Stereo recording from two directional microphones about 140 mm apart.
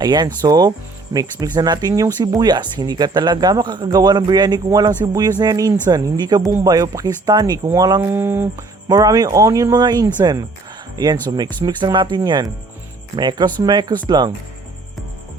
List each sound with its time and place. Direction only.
0.0 s speech: 30° right (ahead or behind)
8.1 s speech: 15° right (ahead or behind)